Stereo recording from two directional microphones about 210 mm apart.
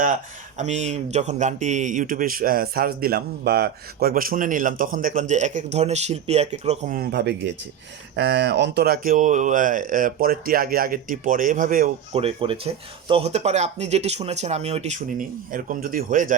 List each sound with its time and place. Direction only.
0.6 s speech: 35° right (ahead or behind)
12.1 s speech: 25° right (ahead or behind)